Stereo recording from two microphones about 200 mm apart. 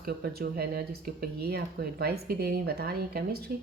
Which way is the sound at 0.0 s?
50° right (ahead or behind).